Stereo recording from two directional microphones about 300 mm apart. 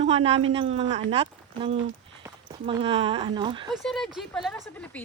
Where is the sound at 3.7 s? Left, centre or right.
Centre.